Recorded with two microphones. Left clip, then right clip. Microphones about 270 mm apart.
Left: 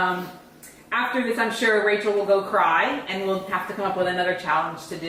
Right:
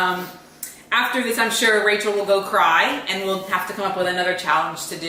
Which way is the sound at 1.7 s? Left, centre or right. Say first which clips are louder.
Right 2 dB; centre.